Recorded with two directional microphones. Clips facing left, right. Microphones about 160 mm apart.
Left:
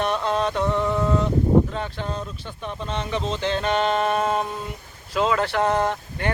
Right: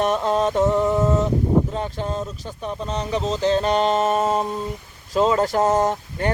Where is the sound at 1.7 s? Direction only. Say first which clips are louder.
Right 3 dB; 35° right (ahead or behind).